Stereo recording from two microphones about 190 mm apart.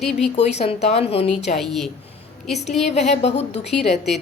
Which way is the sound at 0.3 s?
35° left (ahead or behind).